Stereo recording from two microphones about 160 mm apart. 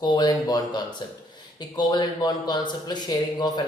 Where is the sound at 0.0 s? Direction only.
25° left (ahead or behind).